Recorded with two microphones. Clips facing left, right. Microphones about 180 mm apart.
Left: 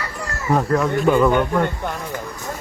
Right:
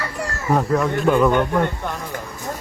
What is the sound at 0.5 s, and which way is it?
Speech, centre (ahead or behind).